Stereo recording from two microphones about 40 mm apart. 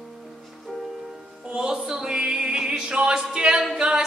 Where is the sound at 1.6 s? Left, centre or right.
Centre.